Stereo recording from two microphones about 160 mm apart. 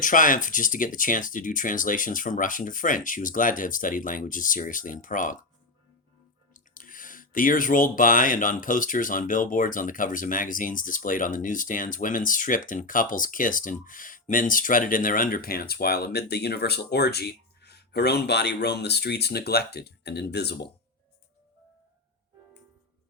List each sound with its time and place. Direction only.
0.0 s speech: 55° left (ahead or behind)
6.5 s speech: 60° left (ahead or behind); by 20.7 s 90° left